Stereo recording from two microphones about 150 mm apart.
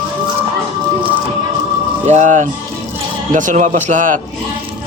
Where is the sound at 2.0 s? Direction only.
50° right (ahead or behind).